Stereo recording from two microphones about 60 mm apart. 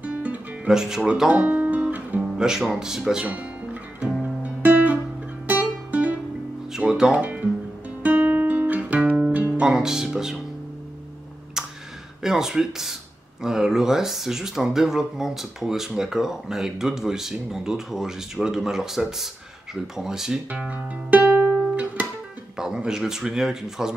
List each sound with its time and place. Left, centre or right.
0.0 s music: right
0.7 s speech: centre
1.4 s guitar: right
2.3 s speech: centre
4.4 s music: right
6.9 s speech: centre
7.2 s music: right
8.0 s guitar: right
9.6 s speech: centre
11.6 s tick: centre
12.2 s speech: centre
20.5 s music: right
22.6 s speech: centre